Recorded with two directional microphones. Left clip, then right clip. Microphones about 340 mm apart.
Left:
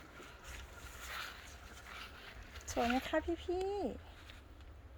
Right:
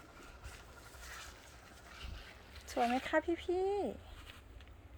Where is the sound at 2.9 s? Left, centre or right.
Centre.